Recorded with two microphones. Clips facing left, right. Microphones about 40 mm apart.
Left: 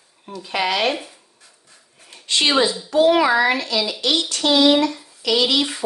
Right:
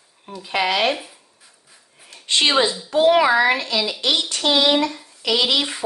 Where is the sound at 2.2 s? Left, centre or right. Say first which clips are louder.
Right 1 dB; right.